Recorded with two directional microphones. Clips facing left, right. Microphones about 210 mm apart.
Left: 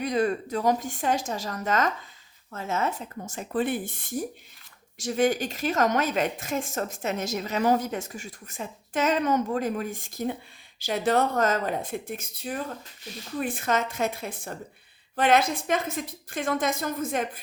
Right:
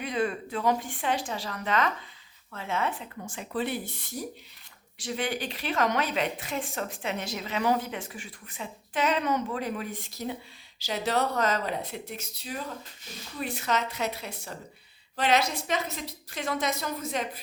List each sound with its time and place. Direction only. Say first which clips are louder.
0.0 s a woman's voice: left 4 dB; 40° left (ahead or behind)